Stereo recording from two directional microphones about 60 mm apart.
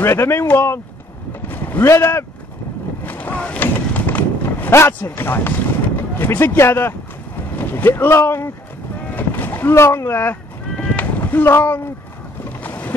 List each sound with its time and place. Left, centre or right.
0.0 s speech: left
1.5 s vehicle: left
1.9 s speech: left
3.1 s boat: left
3.3 s a sound: left
3.6 s a sound: left
4.7 s speech: left
9.1 s boat: left
9.8 s speech: left
10.8 s a sound: left
11.4 s speech: left
12.4 s boat: left